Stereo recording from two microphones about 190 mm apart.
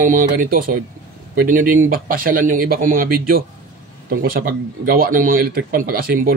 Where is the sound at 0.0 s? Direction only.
45° right (ahead or behind).